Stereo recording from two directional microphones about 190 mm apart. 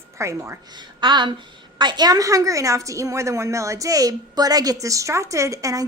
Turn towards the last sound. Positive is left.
turn(degrees=-15)  # may be behind; listen again after turning